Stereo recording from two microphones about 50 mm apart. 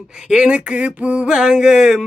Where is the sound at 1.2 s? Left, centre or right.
Centre.